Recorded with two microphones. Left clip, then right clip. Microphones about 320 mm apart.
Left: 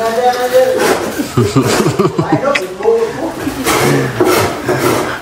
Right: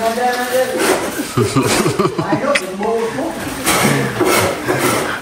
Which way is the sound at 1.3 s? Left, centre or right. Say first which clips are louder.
Left 3 dB; centre.